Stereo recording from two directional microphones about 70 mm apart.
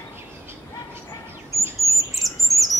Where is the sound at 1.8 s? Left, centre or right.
Right.